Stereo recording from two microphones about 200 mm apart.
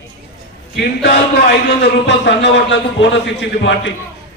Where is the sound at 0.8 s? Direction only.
55° left (ahead or behind).